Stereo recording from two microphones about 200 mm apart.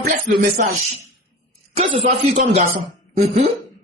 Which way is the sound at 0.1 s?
40° right (ahead or behind).